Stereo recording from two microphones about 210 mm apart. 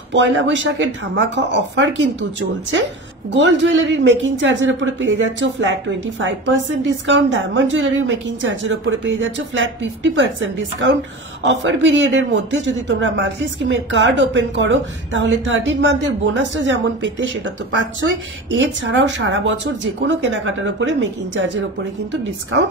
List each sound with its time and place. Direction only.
0.1 s speech: 60° right (ahead or behind)
3.3 s speech: 60° right (ahead or behind)